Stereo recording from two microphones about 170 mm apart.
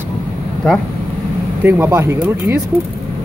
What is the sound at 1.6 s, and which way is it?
Speech, 10° right (ahead or behind).